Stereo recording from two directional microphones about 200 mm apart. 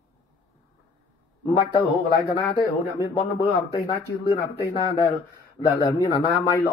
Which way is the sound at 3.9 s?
20° left (ahead or behind).